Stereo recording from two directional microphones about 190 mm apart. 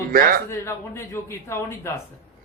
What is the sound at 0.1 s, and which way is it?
Speech, 50° right (ahead or behind).